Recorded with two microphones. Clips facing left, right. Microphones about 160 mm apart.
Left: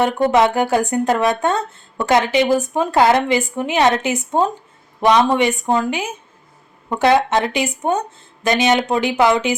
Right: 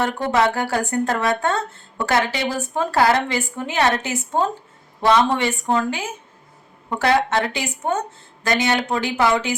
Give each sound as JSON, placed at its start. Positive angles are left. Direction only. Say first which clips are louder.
{"t": 0.3, "sound": "speech", "louder": "left 3 dB", "side_deg": 20}